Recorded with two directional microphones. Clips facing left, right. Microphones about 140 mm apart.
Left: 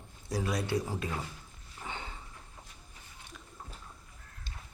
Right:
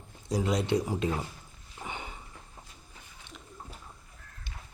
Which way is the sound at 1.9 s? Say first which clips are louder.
Right 1 dB; 15° right (ahead or behind).